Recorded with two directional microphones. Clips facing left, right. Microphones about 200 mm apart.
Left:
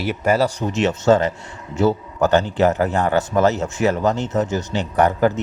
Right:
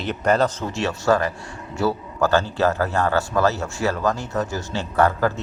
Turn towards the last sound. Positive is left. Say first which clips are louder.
# left 3 dB
turn(degrees=20)  # may be behind; listen again after turning